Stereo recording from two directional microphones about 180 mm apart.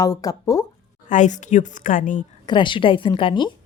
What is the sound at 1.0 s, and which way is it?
A woman's voice, 45° left (ahead or behind).